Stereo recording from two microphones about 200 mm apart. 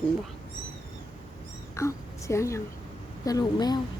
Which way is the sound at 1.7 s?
15° left (ahead or behind).